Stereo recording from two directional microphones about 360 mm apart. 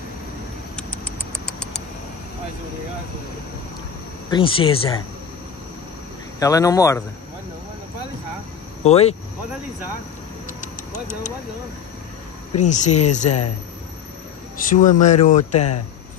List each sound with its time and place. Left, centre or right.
0.7 s rodents: centre
4.3 s speech: centre
6.4 s speech: centre
8.8 s speech: centre
10.6 s a sound: left
12.6 s speech: centre
14.6 s speech: left